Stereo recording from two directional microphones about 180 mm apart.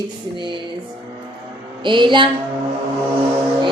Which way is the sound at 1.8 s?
25° right (ahead or behind).